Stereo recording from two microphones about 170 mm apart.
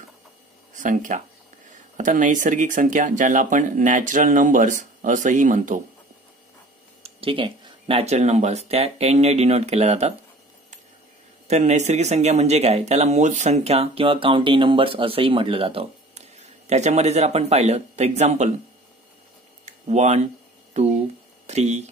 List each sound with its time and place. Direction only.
0.7 s speech: 50° right (ahead or behind)
7.0 s speech: 35° right (ahead or behind)
11.4 s speech: 40° right (ahead or behind)
19.6 s a sound: 40° right (ahead or behind)
20.7 s speech: 40° right (ahead or behind)